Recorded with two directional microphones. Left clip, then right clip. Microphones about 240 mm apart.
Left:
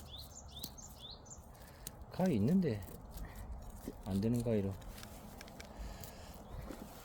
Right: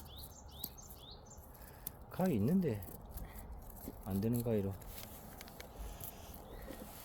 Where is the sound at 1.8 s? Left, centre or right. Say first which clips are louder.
Left 1 dB; centre.